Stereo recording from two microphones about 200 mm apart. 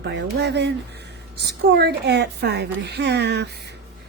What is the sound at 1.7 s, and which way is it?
A woman's voice, 55° right (ahead or behind).